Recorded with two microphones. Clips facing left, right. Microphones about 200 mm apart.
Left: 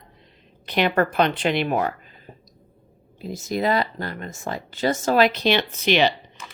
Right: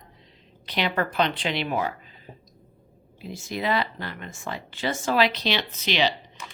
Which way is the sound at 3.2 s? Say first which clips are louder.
Left 5 dB; 40° left (ahead or behind).